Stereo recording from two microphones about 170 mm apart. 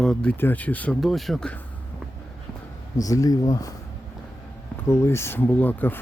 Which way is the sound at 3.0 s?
20° left (ahead or behind).